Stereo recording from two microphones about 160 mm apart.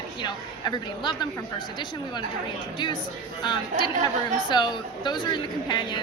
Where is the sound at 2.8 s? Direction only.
30° left (ahead or behind).